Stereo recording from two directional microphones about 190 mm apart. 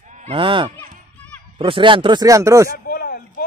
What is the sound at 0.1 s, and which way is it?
Honk, 40° right (ahead or behind).